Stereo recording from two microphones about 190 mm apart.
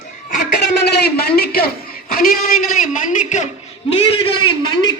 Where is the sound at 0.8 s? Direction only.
55° left (ahead or behind); by 3.4 s 40° left (ahead or behind).